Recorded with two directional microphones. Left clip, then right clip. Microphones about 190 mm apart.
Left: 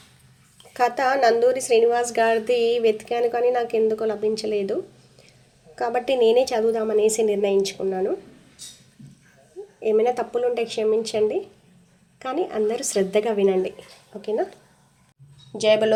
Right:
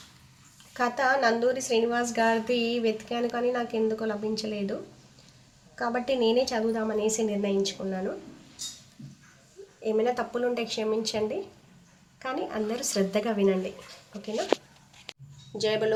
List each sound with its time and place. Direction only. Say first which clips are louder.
0.7 s a woman's voice: left 5 dB; 25° left (ahead or behind)
5.7 s a woman's voice: left 6 dB; 25° left (ahead or behind)
9.8 s speech: left 6 dB; 15° left (ahead or behind)
15.5 s speech: left 9 dB; 30° left (ahead or behind)